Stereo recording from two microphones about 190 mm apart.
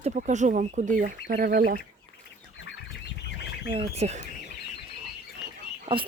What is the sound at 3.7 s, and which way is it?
Speech, 30° right (ahead or behind).